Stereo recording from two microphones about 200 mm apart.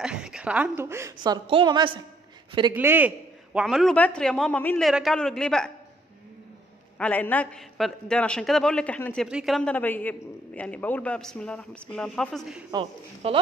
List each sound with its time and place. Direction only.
0.0 s a woman's voice: 5° right (ahead or behind); by 2.0 s 20° right (ahead or behind)
2.7 s a woman's voice: 10° right (ahead or behind)
7.0 s a man's voice: 10° left (ahead or behind)
12.7 s speech: 25° right (ahead or behind)